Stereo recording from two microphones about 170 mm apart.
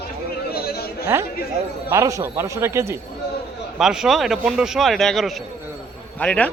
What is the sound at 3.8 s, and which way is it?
A man's voice, 5° right (ahead or behind).